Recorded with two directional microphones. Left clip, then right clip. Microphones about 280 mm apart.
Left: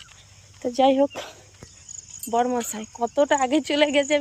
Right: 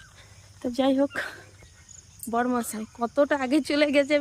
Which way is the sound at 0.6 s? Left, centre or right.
Centre.